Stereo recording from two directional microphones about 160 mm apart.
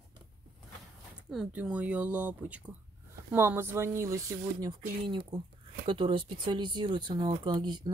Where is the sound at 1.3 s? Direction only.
5° right (ahead or behind).